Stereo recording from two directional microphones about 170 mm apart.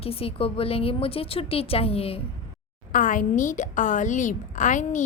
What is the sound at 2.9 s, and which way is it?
A woman's voice, 50° left (ahead or behind).